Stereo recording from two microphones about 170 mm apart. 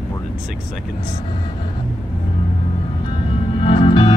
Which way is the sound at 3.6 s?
30° left (ahead or behind).